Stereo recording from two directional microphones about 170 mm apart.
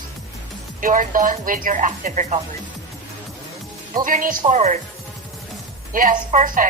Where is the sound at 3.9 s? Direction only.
55° right (ahead or behind).